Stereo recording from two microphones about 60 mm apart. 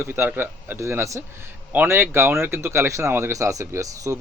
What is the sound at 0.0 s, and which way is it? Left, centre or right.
Speech, right.